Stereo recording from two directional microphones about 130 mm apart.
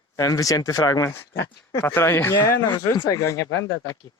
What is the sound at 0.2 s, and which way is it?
Speech, 25° left (ahead or behind).